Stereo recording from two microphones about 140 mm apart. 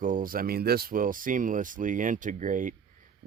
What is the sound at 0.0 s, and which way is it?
Speech, 80° right.